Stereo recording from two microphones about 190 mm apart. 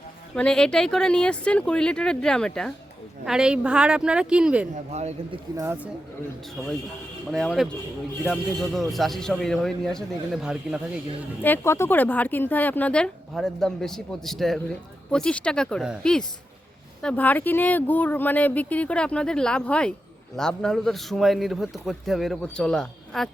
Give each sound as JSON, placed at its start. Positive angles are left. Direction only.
{"t": 0.3, "sound": "a man's voice", "side_deg": 5}
{"t": 4.7, "sound": "speech", "side_deg": -35}
{"t": 5.5, "sound": "speech", "side_deg": -10}
{"t": 7.3, "sound": "a man's voice", "side_deg": 5}
{"t": 11.4, "sound": "a man's voice", "side_deg": 10}